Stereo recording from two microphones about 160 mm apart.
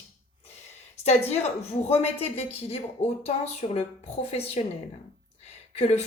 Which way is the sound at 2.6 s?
40° left (ahead or behind).